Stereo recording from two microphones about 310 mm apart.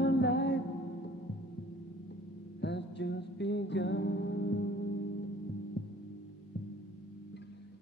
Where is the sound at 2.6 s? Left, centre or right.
Left.